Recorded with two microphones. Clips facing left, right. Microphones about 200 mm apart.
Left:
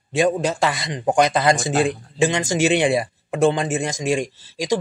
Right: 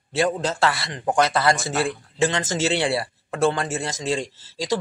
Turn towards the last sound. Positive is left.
turn(degrees=15)  # may be behind; listen again after turning